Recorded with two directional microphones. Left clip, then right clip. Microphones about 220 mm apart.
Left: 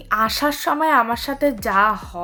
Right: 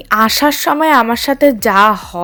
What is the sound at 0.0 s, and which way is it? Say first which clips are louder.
Speech: right 8 dB; 35° right (ahead or behind).